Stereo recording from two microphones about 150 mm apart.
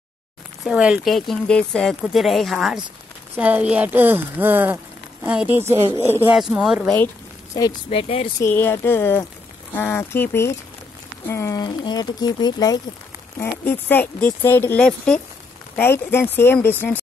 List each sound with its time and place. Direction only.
0.7 s speech: 5° right (ahead or behind)
6.2 s speech: 5° right (ahead or behind)
7.9 s speech: 40° left (ahead or behind)
8.4 s speech: 15° left (ahead or behind)
13.4 s speech: 15° left (ahead or behind)